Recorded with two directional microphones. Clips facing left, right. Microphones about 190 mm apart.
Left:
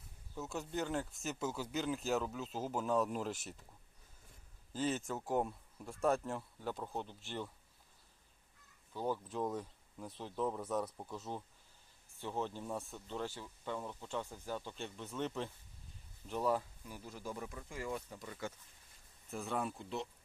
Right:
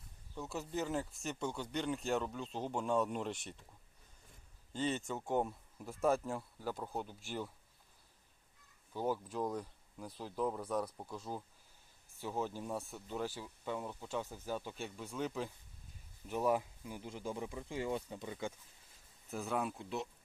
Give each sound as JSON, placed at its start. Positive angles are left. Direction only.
{"t": 0.3, "sound": "speech", "side_deg": 0}
{"t": 4.7, "sound": "speech", "side_deg": 5}
{"t": 8.9, "sound": "speech", "side_deg": -10}
{"t": 19.3, "sound": "speech", "side_deg": 0}